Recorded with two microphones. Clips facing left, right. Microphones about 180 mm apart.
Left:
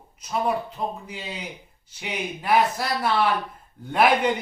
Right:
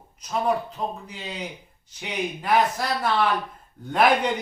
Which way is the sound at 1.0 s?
10° left (ahead or behind).